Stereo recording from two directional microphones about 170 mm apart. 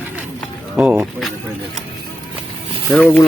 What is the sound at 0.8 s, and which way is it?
Speech, 10° right (ahead or behind).